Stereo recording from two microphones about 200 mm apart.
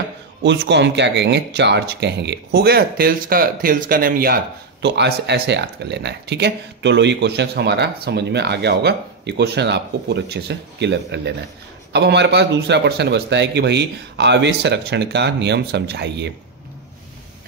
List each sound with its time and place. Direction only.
0.4 s speech: 60° right (ahead or behind)
4.8 s speech: 60° right (ahead or behind)